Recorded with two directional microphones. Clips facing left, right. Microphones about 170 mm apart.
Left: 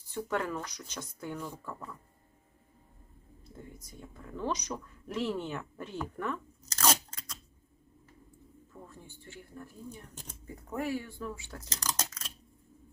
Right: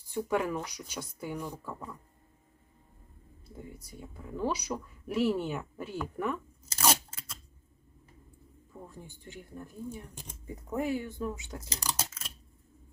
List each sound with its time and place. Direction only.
0.1 s speech: 10° right (ahead or behind)
3.5 s speech: 10° right (ahead or behind)
8.7 s speech: 15° right (ahead or behind)